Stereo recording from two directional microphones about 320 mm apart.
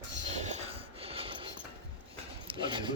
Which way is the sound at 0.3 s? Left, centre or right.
Right.